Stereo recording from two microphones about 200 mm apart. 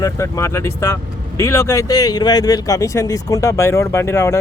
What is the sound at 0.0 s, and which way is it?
Speech, 15° left (ahead or behind).